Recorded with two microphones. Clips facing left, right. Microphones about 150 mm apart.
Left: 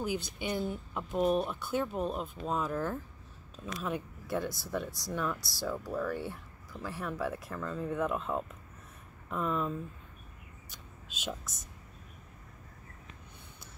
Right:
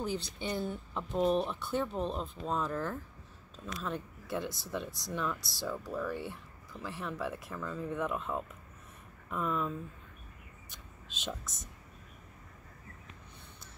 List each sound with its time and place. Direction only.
0.4 s speech: 10° left (ahead or behind)
4.5 s speech: 20° right (ahead or behind)
5.1 s speech: 5° left (ahead or behind)
10.7 s a sound: 5° left (ahead or behind)